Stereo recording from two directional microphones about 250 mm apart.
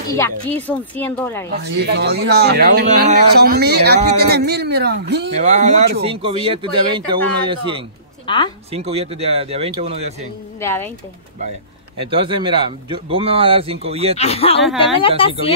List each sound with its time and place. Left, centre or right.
0.1 s speech: centre
1.5 s speech: right
5.4 s speech: right
8.3 s speech: centre
8.7 s speech: right
10.6 s speech: centre
12.1 s speech: right
14.1 s speech: left